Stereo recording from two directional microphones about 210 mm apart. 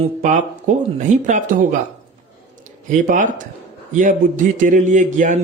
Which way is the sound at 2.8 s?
40° right (ahead or behind).